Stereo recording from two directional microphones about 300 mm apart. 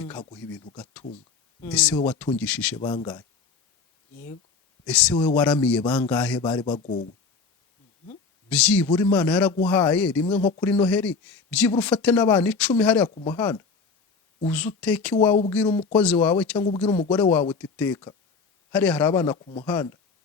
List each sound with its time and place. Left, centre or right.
0.0 s speech: centre
4.9 s speech: centre
6.4 s speech: centre
6.7 s speech: left
8.4 s speech: centre
13.1 s speech: centre
13.3 s speech: centre